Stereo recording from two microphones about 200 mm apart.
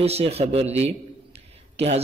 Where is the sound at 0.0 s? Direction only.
30° right (ahead or behind).